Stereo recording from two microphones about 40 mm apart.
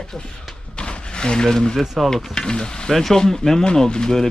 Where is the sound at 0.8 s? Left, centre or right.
Left.